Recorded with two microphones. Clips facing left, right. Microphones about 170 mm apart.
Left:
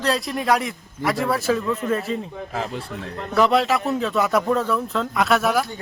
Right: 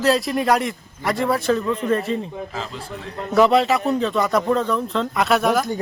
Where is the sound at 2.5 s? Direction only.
60° left (ahead or behind).